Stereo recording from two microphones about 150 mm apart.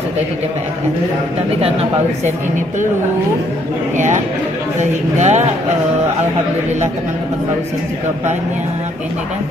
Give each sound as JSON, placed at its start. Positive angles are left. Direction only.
{"t": 1.6, "sound": "speech", "side_deg": -45}
{"t": 3.9, "sound": "speech", "side_deg": -55}